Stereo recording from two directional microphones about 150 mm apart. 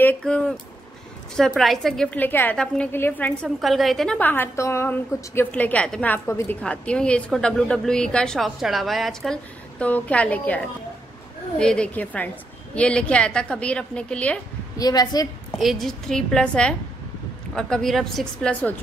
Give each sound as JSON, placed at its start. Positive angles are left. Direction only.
{"t": 0.0, "sound": "a woman's voice", "side_deg": 10}
{"t": 3.4, "sound": "a woman's voice", "side_deg": 0}
{"t": 14.8, "sound": "a woman's voice", "side_deg": 25}
{"t": 15.6, "sound": "a woman's voice", "side_deg": 0}